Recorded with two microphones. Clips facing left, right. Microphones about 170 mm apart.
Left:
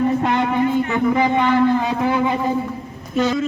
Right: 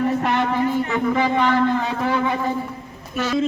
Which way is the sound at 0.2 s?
15° left (ahead or behind).